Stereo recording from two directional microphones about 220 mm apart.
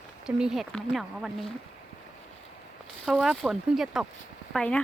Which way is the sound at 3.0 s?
Centre (ahead or behind).